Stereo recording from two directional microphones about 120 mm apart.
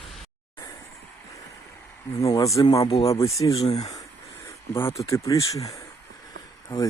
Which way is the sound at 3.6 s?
65° left (ahead or behind).